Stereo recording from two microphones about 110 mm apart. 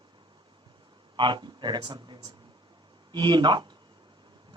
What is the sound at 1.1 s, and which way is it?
Speech, 45° right (ahead or behind).